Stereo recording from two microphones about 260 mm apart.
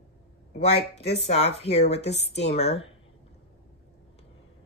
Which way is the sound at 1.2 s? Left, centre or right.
Left.